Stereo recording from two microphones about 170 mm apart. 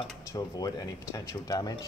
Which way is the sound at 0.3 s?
20° left (ahead or behind).